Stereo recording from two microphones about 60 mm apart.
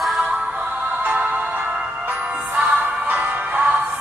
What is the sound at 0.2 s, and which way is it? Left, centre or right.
Music, centre.